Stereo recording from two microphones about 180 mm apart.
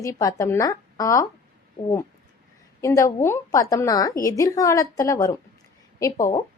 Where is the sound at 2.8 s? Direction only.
20° left (ahead or behind).